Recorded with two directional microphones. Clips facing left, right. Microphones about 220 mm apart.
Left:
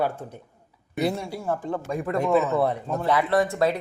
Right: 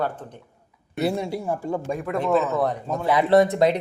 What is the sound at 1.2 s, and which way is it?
Speech, 20° right (ahead or behind).